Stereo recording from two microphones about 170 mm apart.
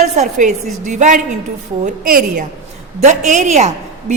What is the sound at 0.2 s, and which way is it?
A woman's voice, 45° right (ahead or behind).